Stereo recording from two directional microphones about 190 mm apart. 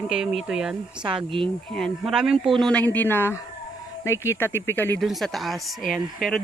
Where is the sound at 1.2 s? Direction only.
25° right (ahead or behind).